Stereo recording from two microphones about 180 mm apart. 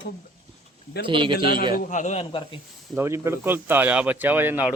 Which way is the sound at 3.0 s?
15° right (ahead or behind).